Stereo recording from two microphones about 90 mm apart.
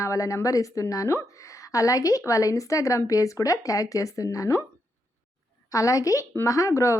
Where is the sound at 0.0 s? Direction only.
35° left (ahead or behind).